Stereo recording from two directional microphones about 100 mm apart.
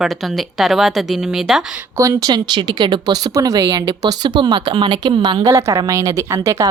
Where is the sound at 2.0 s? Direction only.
35° right (ahead or behind); by 5.4 s 50° right (ahead or behind).